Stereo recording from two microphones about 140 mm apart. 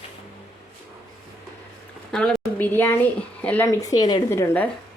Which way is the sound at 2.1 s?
10° left (ahead or behind).